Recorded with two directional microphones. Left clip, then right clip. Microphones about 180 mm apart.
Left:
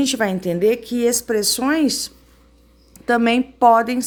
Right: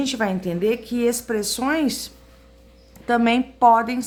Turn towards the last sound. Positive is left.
turn(degrees=30)  # may be behind; listen again after turning